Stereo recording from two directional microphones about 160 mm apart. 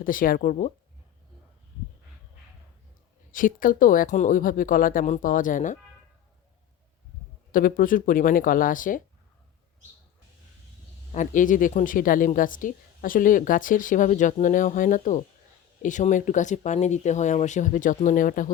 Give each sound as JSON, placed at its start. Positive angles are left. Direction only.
{"t": 0.0, "sound": "a woman's voice", "side_deg": 60}
{"t": 3.3, "sound": "a woman's voice", "side_deg": 60}
{"t": 7.5, "sound": "a woman's voice", "side_deg": 60}
{"t": 11.1, "sound": "a woman's voice", "side_deg": 50}